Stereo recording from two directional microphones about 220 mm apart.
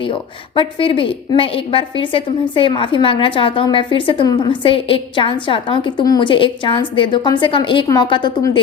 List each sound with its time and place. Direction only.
0.0 s a woman's voice: 25° left (ahead or behind)